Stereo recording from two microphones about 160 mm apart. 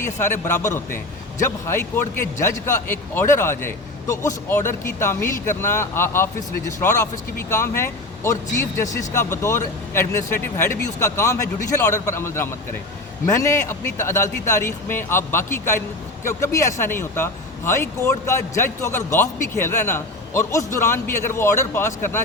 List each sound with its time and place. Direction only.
0.0 s speech: 15° left (ahead or behind)